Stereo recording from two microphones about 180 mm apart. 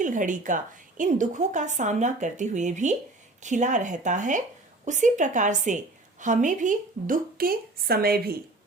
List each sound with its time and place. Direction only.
0.0 s a woman's voice: 45° right (ahead or behind)